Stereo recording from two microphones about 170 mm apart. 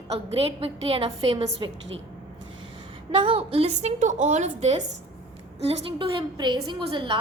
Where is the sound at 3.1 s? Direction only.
30° right (ahead or behind).